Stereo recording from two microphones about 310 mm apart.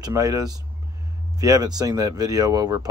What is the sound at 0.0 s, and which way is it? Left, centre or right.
Speech, centre.